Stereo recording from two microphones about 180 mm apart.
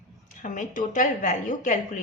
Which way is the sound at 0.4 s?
45° left (ahead or behind).